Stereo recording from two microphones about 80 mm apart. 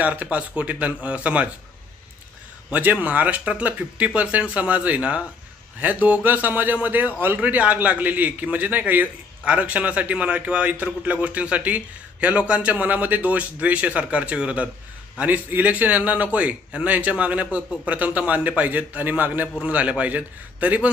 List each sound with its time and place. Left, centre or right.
0.0 s a man's voice: centre
2.7 s a man's voice: centre